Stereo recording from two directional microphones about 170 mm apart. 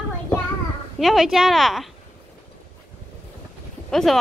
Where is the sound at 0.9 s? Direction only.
Centre (ahead or behind).